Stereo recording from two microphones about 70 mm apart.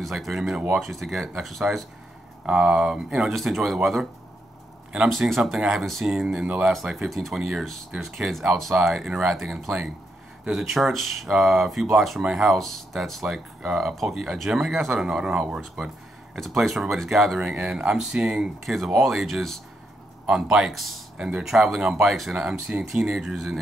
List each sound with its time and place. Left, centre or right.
0.0 s speech: centre
2.4 s speech: centre
5.2 s speech: centre
6.7 s speech: centre
17.4 s speech: centre
21.2 s speech: centre